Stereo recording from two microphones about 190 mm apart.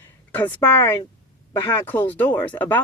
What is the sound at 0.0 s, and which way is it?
Speech, 10° left (ahead or behind).